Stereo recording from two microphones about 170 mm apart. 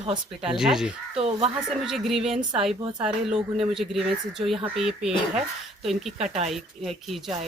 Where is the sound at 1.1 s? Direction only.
40° right (ahead or behind).